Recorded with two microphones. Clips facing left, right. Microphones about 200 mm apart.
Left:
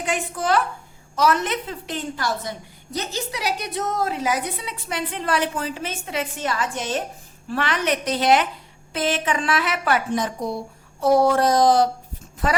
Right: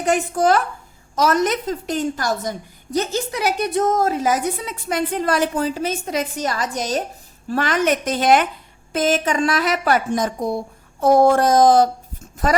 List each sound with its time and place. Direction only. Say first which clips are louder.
0.0 s a woman's voice: right 7 dB; 45° right (ahead or behind)